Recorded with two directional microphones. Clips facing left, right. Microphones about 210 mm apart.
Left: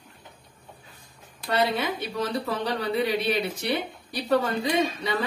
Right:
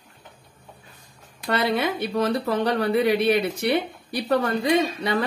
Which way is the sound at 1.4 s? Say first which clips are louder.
Right 2 dB; 60° right (ahead or behind).